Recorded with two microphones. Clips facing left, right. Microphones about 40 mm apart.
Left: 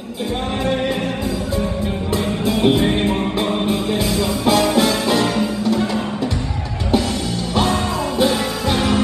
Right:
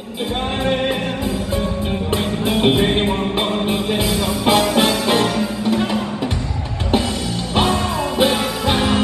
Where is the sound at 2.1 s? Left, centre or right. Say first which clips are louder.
Even; right.